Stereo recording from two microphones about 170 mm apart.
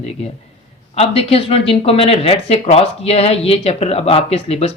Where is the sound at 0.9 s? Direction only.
35° left (ahead or behind).